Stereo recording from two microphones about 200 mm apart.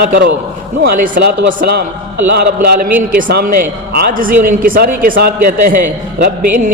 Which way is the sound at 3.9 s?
45° right (ahead or behind).